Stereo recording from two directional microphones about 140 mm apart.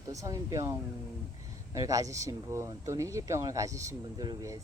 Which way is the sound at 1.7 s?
25° right (ahead or behind).